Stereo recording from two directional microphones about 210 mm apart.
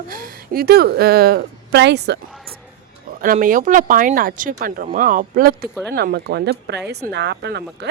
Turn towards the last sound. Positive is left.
turn(degrees=-55)  # may be behind; listen again after turning